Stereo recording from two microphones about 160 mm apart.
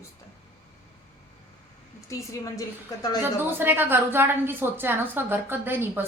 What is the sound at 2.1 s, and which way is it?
Speech, 20° left (ahead or behind).